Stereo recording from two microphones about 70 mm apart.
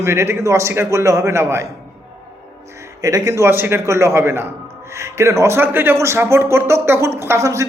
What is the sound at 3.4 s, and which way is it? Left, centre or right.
Speech, right.